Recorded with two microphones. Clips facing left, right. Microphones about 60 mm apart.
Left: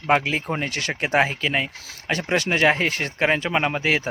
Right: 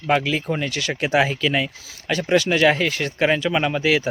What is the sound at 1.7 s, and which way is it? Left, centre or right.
Speech, left.